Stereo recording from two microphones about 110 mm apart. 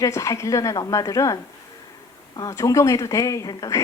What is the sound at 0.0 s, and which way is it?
A woman's voice, 30° left (ahead or behind).